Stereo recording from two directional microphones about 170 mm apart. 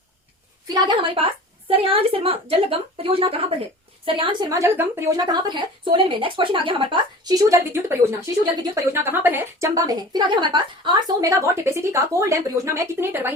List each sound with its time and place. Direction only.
0.7 s a woman's voice: 30° right (ahead or behind)
7.5 s a woman's voice: 15° right (ahead or behind)